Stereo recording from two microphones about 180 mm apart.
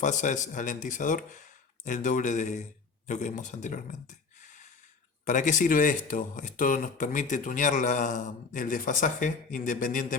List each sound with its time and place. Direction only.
0.0 s speech: 45° left (ahead or behind)
4.4 s gasp: 45° left (ahead or behind)
5.2 s speech: 45° left (ahead or behind)